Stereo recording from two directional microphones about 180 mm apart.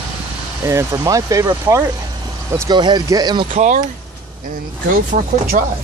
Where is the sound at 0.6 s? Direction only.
15° right (ahead or behind).